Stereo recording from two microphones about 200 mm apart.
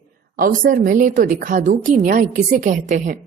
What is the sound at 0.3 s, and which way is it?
A woman's voice, 45° right (ahead or behind).